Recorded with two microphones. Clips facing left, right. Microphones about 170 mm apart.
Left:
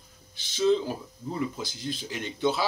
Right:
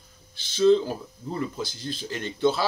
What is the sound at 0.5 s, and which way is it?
Speech, 15° left (ahead or behind).